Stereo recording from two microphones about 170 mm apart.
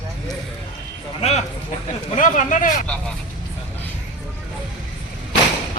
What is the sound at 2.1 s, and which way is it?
Speech, 50° left (ahead or behind).